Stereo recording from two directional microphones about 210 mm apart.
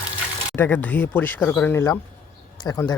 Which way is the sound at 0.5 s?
10° left (ahead or behind).